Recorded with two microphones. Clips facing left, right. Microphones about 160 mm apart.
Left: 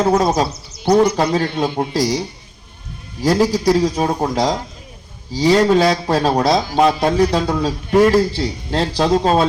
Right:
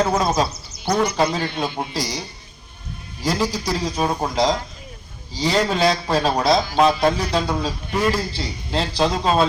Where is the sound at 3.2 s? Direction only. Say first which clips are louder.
Left 8 dB; 45° left (ahead or behind).